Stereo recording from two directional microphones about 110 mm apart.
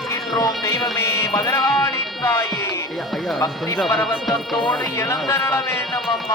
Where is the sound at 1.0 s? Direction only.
25° left (ahead or behind).